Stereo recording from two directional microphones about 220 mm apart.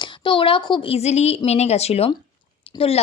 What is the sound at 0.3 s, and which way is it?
A woman's voice, 25° left (ahead or behind).